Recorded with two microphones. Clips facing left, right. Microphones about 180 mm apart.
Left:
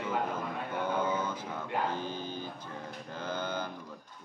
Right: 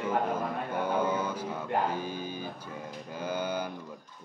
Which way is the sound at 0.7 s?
10° right (ahead or behind).